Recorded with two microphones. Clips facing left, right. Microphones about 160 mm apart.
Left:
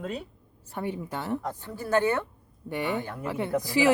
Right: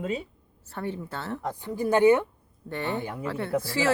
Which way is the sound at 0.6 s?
15° left (ahead or behind).